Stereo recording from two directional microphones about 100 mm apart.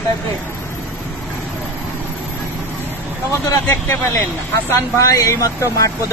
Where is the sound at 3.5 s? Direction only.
30° left (ahead or behind).